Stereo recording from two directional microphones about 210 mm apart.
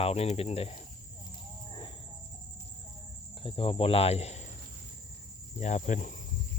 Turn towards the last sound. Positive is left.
turn(degrees=35)  # may be behind; listen again after turning